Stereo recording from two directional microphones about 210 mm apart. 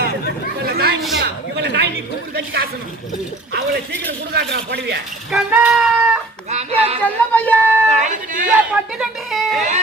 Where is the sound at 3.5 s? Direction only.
55° right (ahead or behind).